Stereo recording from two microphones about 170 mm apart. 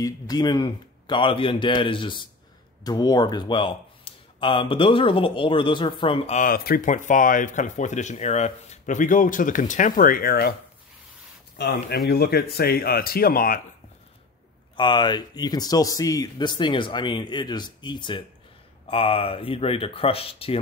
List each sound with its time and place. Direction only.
0.0 s speech: 25° left (ahead or behind)
6.4 s speech: 60° left (ahead or behind)
11.5 s speech: 70° left (ahead or behind)
14.8 s speech: 25° left (ahead or behind)